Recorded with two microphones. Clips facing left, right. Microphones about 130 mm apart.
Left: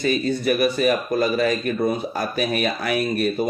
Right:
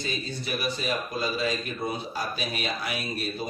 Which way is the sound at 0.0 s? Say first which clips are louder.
Left 12 dB; 60° left (ahead or behind).